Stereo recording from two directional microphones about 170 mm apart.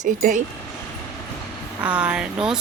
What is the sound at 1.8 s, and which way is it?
Speech, 5° right (ahead or behind).